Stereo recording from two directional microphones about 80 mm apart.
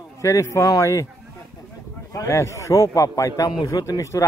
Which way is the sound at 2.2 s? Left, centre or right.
Left.